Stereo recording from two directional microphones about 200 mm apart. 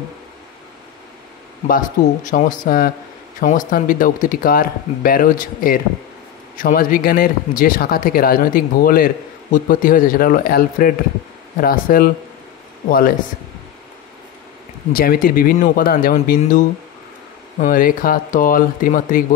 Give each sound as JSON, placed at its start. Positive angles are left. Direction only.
{"t": 1.7, "sound": "speech", "side_deg": 40}
{"t": 14.9, "sound": "speech", "side_deg": 45}